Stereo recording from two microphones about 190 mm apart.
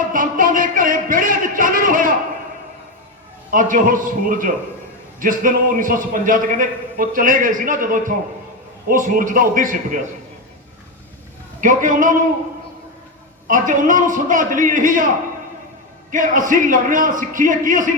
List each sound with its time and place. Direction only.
0.1 s a sound: 45° right (ahead or behind)
3.5 s a man's voice: 45° right (ahead or behind)
11.6 s a man's voice: 45° right (ahead or behind)
13.5 s a man's voice: 45° right (ahead or behind)
16.1 s a man's voice: 45° right (ahead or behind)